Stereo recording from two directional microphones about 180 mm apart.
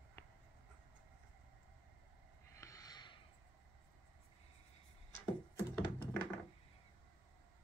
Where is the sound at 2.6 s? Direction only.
20° left (ahead or behind).